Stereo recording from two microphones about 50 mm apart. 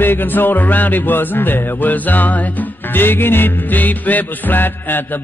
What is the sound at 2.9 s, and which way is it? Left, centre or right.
Music, left.